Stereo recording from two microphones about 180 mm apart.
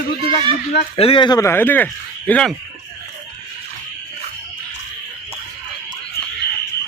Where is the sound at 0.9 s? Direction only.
30° left (ahead or behind); by 2.5 s 5° left (ahead or behind).